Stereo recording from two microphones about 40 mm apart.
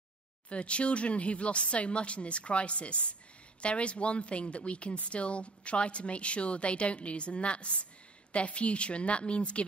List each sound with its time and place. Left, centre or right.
0.5 s a woman's voice: left